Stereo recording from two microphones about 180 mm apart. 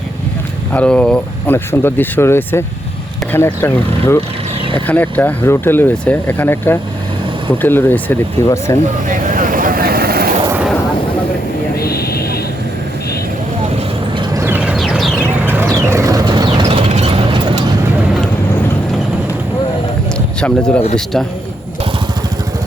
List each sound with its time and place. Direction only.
0.7 s speech: 5° left (ahead or behind)
9.0 s vehicle: 45° right (ahead or behind)
11.8 s a sound: 60° left (ahead or behind)
14.2 s vehicle: 15° right (ahead or behind)
15.2 s vehicle: 10° right (ahead or behind); by 17.6 s 30° right (ahead or behind)
20.1 s a sound: 5° left (ahead or behind)
20.9 s a man's voice: 5° left (ahead or behind)